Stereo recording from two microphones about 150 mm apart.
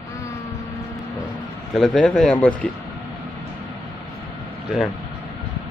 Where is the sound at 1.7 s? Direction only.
Centre (ahead or behind).